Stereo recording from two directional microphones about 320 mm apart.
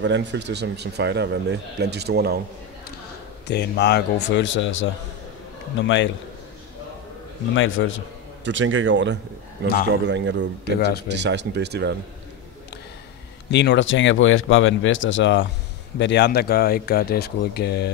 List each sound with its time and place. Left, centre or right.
0.0 s speech: right
3.4 s speech: left
7.5 s speech: left
8.5 s speech: right
10.8 s speech: left
11.1 s speech: right
13.5 s speech: left